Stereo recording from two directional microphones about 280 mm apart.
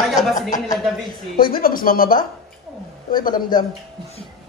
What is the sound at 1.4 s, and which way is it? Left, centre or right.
Speech, left.